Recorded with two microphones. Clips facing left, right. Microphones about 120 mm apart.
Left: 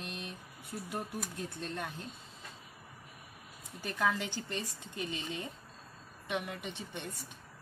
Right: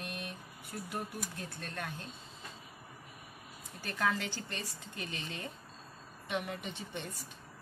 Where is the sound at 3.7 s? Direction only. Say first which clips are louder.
Left 1 dB; 10° left (ahead or behind).